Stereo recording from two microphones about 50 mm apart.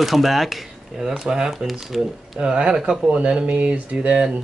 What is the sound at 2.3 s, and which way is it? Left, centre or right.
Speech, centre.